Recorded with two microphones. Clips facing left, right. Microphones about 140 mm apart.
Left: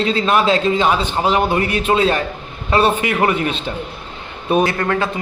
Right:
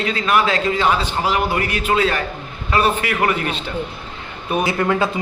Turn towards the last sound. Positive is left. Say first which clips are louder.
# even
turn(degrees=-10)  # may be behind; listen again after turning